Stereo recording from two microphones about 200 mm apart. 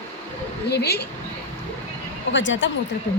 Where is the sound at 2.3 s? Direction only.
65° left (ahead or behind).